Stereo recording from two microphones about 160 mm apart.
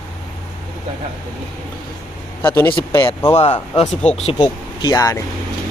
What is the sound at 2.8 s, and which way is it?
Speech, 15° left (ahead or behind).